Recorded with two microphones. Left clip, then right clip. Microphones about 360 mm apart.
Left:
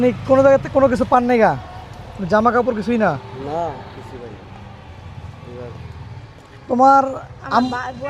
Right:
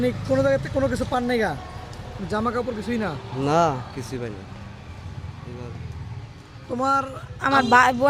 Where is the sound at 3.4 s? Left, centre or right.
Right.